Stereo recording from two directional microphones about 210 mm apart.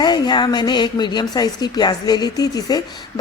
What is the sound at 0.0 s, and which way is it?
A woman's voice, 20° left (ahead or behind).